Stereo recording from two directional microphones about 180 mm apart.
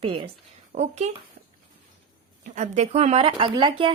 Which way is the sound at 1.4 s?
60° right (ahead or behind).